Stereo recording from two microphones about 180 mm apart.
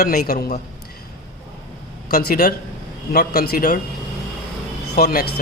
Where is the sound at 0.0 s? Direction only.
60° left (ahead or behind).